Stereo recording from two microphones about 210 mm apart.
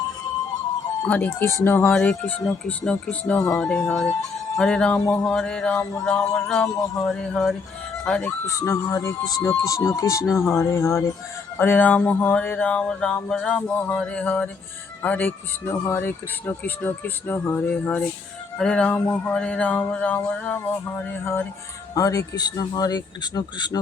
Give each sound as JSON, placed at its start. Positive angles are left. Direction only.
{"t": 1.0, "sound": "speech", "side_deg": 5}